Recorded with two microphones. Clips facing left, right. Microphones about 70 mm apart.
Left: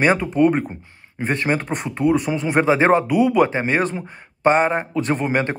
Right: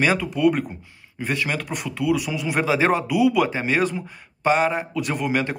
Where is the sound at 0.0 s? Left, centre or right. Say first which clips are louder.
Left 3 dB; left.